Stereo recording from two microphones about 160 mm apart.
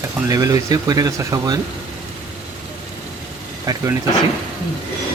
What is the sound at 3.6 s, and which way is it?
Speech, 20° right (ahead or behind).